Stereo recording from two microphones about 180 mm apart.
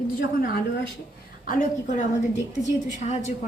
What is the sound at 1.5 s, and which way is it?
Speech, 45° left (ahead or behind).